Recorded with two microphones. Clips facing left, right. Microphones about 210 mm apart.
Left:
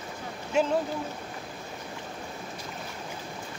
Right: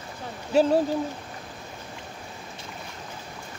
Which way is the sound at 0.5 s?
35° right (ahead or behind).